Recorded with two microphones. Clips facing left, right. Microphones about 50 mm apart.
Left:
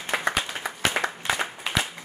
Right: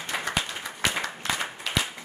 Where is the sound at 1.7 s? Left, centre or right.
Centre.